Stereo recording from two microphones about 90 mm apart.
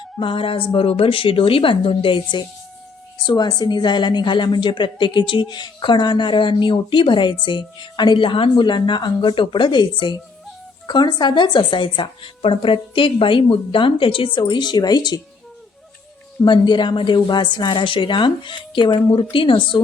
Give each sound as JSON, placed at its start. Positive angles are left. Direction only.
{"t": 0.2, "sound": "a woman's voice", "side_deg": 80}
{"t": 3.2, "sound": "a woman's voice", "side_deg": 50}
{"t": 14.3, "sound": "speech", "side_deg": 60}
{"t": 16.4, "sound": "a woman's voice", "side_deg": 55}